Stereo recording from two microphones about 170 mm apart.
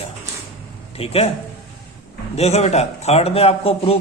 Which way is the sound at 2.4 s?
40° left (ahead or behind).